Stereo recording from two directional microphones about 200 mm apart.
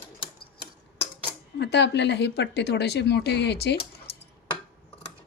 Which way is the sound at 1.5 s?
55° left (ahead or behind).